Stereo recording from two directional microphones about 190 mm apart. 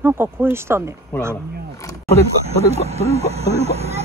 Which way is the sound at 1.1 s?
10° left (ahead or behind).